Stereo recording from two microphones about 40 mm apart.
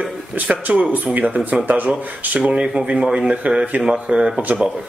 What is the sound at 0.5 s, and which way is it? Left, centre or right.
Speech, right.